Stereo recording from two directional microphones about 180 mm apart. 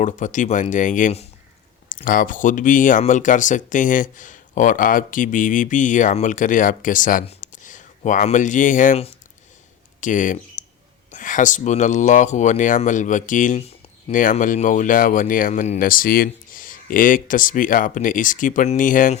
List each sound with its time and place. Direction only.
0.0 s speech: 45° left (ahead or behind)
10.0 s speech: 45° left (ahead or behind)
10.6 s a sound: 45° left (ahead or behind)
11.1 s speech: 45° left (ahead or behind)